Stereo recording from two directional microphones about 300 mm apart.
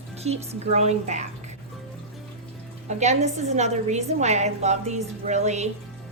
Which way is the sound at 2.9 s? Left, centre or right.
Right.